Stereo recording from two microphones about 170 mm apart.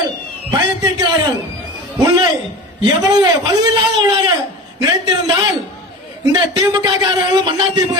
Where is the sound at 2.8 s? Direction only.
25° right (ahead or behind).